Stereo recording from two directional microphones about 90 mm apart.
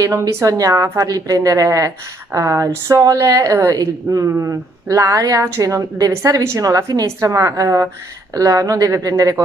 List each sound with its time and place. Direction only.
0.0 s speech: 35° right (ahead or behind)